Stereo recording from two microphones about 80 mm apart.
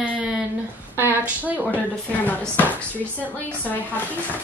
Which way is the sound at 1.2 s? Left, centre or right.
Centre.